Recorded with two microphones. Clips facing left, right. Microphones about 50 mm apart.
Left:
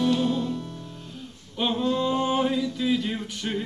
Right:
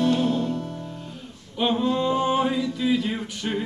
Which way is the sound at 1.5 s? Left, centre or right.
Centre.